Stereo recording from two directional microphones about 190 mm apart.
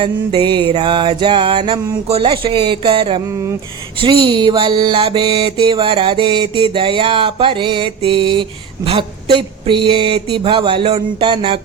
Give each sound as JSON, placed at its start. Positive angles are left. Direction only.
{"t": 0.0, "sound": "mantra", "side_deg": -25}